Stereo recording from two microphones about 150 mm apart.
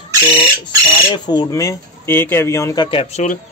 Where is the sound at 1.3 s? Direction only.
25° left (ahead or behind).